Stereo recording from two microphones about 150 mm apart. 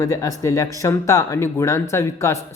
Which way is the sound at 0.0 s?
20° left (ahead or behind).